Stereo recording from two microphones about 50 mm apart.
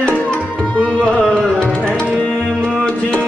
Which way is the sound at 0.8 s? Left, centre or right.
Left.